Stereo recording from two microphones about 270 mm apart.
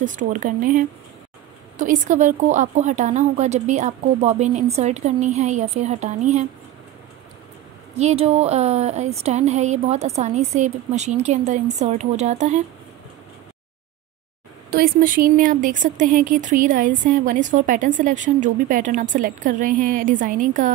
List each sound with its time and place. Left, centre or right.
0.0 s speech: right
7.9 s speech: right
14.7 s speech: right